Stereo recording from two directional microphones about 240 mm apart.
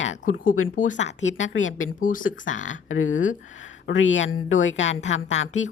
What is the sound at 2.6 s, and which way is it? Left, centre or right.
A woman's voice, left.